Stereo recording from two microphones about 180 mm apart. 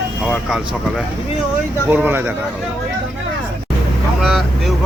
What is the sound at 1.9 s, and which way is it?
Speech, 10° right (ahead or behind).